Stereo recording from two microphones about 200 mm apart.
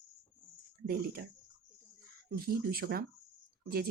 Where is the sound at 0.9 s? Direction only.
50° right (ahead or behind).